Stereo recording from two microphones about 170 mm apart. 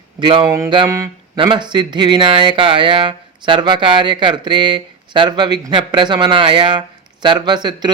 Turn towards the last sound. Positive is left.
turn(degrees=-25)  # may be behind; listen again after turning